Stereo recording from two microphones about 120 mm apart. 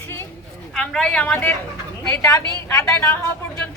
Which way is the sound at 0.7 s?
5° left (ahead or behind).